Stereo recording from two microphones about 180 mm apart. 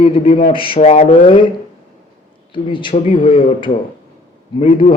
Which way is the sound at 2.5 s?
25° left (ahead or behind).